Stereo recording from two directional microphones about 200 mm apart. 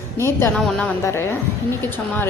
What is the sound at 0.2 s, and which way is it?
A woman's voice, 15° left (ahead or behind).